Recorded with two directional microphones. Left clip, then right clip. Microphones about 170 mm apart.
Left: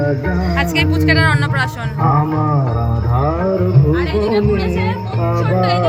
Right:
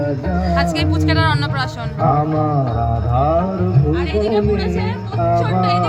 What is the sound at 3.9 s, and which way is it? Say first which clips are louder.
Speech: even; 25° left (ahead or behind).